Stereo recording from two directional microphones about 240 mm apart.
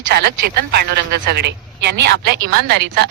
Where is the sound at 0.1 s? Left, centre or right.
Right.